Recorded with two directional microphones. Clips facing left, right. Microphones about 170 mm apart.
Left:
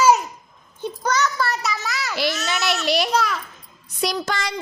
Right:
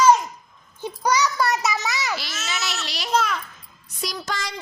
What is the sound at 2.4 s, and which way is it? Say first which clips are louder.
Baby cry: left 7 dB; 60° left (ahead or behind).